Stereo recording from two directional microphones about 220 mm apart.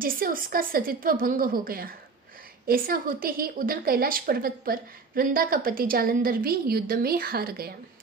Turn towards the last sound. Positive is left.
turn(degrees=-45)  # may be behind; listen again after turning